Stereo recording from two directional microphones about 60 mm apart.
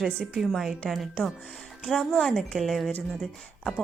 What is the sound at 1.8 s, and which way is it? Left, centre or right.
Speech, centre.